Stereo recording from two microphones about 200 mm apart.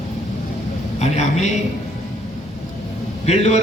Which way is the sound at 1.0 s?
35° left (ahead or behind).